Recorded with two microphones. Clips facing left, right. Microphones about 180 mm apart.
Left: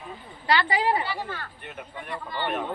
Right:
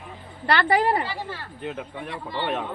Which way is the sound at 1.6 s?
90° right.